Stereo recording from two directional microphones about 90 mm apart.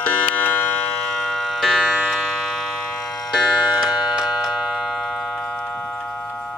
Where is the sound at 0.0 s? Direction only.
20° left (ahead or behind).